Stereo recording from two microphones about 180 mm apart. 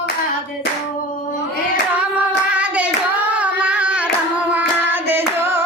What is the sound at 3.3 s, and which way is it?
Singing, 5° right (ahead or behind).